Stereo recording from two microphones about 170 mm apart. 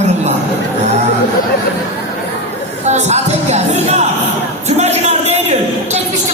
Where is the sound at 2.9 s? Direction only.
40° right (ahead or behind).